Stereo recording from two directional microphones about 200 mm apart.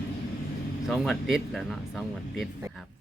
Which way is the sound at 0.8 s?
Centre (ahead or behind).